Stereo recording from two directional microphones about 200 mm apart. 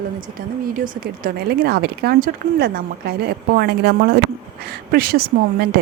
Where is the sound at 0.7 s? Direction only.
45° right (ahead or behind).